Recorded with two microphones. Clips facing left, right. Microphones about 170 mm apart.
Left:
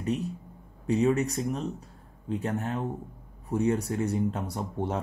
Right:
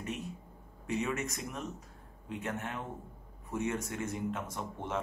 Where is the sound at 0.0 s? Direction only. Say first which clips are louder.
Left 9 dB; 35° left (ahead or behind).